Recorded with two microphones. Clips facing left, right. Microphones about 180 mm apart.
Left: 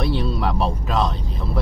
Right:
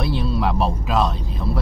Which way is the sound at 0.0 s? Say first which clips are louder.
Even; centre (ahead or behind).